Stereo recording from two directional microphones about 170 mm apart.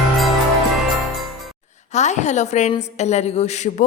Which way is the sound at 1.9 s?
45° left (ahead or behind).